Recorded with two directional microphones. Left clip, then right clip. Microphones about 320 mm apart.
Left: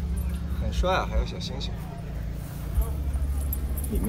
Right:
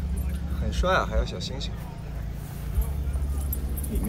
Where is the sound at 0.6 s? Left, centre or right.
Centre.